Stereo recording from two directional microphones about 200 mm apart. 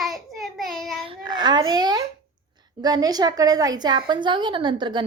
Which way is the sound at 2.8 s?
20° right (ahead or behind).